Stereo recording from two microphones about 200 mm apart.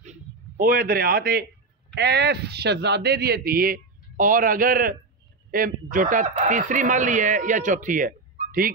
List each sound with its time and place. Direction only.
0.6 s speech: 45° right (ahead or behind)